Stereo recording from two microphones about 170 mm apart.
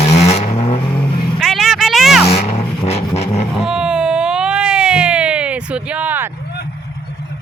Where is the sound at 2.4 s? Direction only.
40° left (ahead or behind).